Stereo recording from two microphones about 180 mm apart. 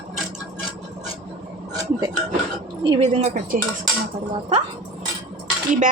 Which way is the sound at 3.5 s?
50° right (ahead or behind).